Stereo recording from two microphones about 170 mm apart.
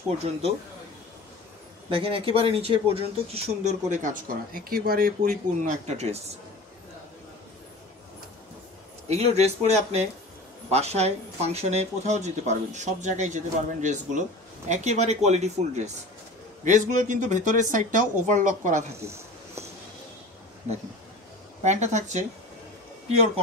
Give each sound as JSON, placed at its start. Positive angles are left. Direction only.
{"t": 1.9, "sound": "speech", "side_deg": -30}
{"t": 9.0, "sound": "speech", "side_deg": -40}
{"t": 18.9, "sound": "a sound", "side_deg": -15}
{"t": 21.6, "sound": "speech", "side_deg": -45}